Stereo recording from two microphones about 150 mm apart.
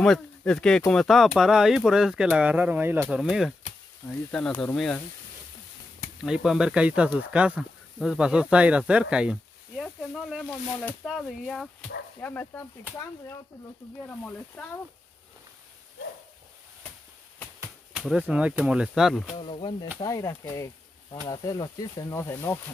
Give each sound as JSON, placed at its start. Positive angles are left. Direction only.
{"t": 0.0, "sound": "speech", "side_deg": 5}
{"t": 3.2, "sound": "speech", "side_deg": 0}
{"t": 6.2, "sound": "speech", "side_deg": -5}
{"t": 14.0, "sound": "speech", "side_deg": 10}
{"t": 17.9, "sound": "speech", "side_deg": -5}
{"t": 19.3, "sound": "speech", "side_deg": 35}
{"t": 20.0, "sound": "speech", "side_deg": 20}